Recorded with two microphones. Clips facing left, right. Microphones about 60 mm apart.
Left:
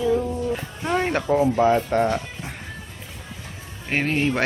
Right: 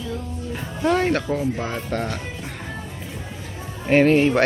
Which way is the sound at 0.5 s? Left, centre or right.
Centre.